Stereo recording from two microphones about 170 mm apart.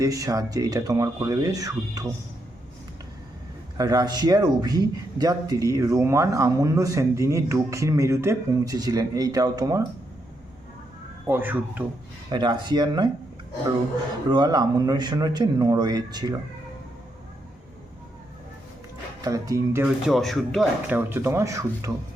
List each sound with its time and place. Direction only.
0.0 s a man's voice: 20° right (ahead or behind)
3.8 s a man's voice: 20° right (ahead or behind)
11.3 s speech: 10° right (ahead or behind)
12.3 s a man's voice: 25° right (ahead or behind)
14.3 s a man's voice: 25° right (ahead or behind)
19.2 s a man's voice: 20° right (ahead or behind)
20.1 s speech: centre (ahead or behind)
20.8 s speech: 10° right (ahead or behind)